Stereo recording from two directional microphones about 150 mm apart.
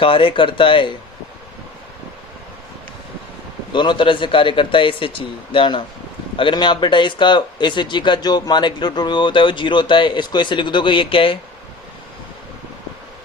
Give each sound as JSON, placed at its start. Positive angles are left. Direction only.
{"t": 0.0, "sound": "speech", "side_deg": 35}
{"t": 3.7, "sound": "speech", "side_deg": 30}